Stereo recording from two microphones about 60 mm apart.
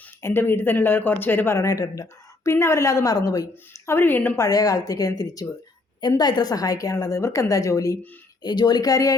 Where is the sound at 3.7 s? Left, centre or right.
Left.